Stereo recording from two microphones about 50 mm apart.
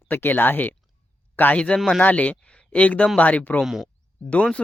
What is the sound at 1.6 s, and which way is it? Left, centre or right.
Speech, left.